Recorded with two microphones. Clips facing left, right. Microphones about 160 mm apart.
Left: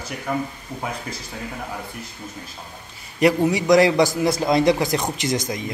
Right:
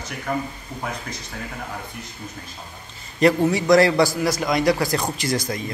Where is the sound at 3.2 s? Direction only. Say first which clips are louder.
Even; 15° left (ahead or behind).